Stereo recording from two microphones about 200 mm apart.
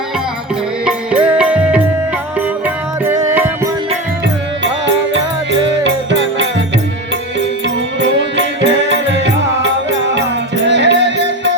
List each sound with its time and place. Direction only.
0.9 s music: 5° right (ahead or behind)
4.6 s music: 65° right (ahead or behind)
8.0 s music: 65° right (ahead or behind)